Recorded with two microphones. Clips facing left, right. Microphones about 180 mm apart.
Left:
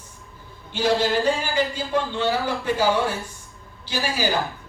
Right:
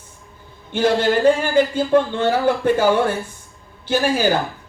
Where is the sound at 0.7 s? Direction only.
55° right (ahead or behind).